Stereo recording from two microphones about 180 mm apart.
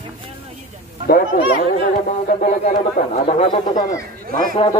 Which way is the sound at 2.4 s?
40° left (ahead or behind).